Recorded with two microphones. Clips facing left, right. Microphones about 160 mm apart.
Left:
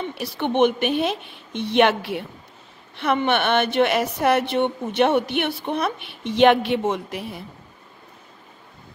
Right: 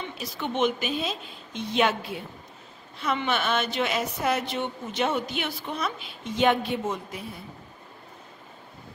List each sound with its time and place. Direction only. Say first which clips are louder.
0.0 s a woman's voice: left 7 dB; 65° left (ahead or behind); by 7.4 s 80° left